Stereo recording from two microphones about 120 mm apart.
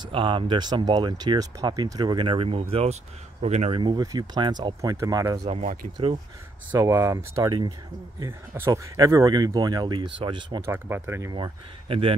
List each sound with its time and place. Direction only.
0.0 s speech: 45° right (ahead or behind)
3.4 s speech: 70° right (ahead or behind)
3.7 s speech: 40° right (ahead or behind)
5.4 s speech: 80° right
6.7 s speech: 25° right (ahead or behind); by 10.6 s 45° right (ahead or behind)
10.6 s speech: 20° right (ahead or behind)
11.3 s speech: 45° right (ahead or behind)